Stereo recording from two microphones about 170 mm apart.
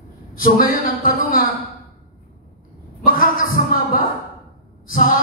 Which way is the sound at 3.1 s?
55° left (ahead or behind).